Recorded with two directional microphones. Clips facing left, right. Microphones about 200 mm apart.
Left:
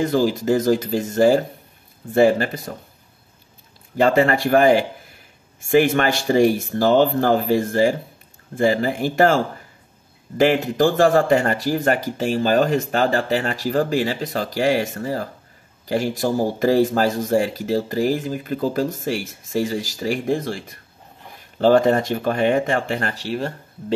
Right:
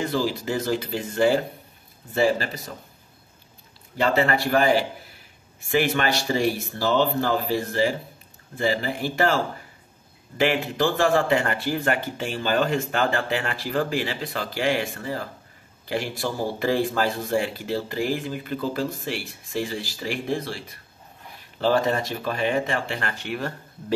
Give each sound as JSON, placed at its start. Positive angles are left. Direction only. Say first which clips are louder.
{"t": 0.0, "sound": "speech", "louder": "left 6 dB", "side_deg": 45}
{"t": 3.9, "sound": "speech", "louder": "left 5 dB", "side_deg": 45}